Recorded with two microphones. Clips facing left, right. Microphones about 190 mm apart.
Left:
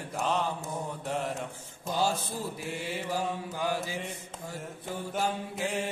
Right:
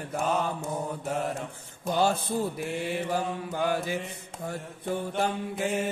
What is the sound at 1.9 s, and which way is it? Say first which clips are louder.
Mantra: right 4 dB; 60° right (ahead or behind).